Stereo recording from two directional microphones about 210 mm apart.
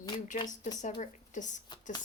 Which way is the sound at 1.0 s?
35° left (ahead or behind).